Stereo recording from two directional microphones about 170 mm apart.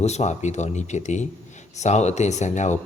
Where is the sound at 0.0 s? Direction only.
40° left (ahead or behind).